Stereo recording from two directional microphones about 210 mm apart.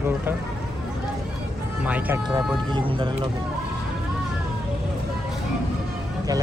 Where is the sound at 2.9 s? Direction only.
25° right (ahead or behind).